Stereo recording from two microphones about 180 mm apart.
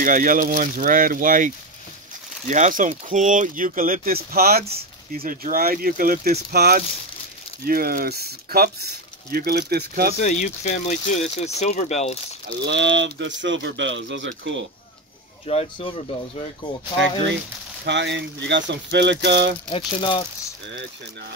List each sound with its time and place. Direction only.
0.0 s speech: 50° right (ahead or behind)
10.1 s speech: 40° left (ahead or behind)
12.6 s speech: 80° right
15.4 s speech: 30° left (ahead or behind)
17.8 s speech: 80° right
19.7 s speech: 25° left (ahead or behind)